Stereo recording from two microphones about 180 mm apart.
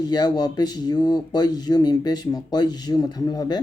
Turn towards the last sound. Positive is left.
turn(degrees=20)  # may be behind; listen again after turning